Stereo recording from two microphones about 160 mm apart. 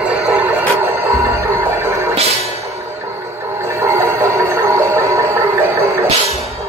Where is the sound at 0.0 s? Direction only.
5° right (ahead or behind).